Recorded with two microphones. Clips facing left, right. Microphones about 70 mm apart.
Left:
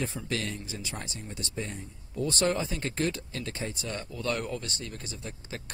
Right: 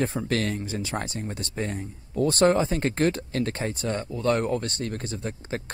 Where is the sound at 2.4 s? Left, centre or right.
Right.